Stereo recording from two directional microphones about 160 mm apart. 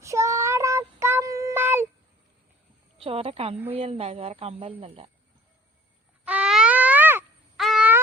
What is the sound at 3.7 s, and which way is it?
Speech, 40° right (ahead or behind).